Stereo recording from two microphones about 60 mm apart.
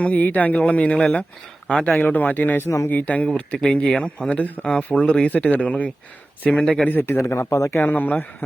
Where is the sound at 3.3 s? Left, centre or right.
Centre.